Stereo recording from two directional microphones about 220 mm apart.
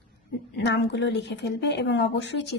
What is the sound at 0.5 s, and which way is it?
Speech, 50° left (ahead or behind).